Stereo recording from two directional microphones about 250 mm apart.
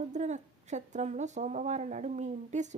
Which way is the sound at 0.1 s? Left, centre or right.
Right.